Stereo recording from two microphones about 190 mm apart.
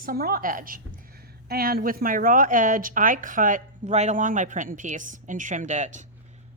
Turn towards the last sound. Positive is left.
turn(degrees=-40)  # may be behind; listen again after turning